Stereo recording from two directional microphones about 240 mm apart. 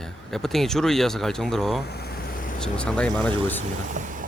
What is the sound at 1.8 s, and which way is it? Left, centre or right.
Vehicle, left.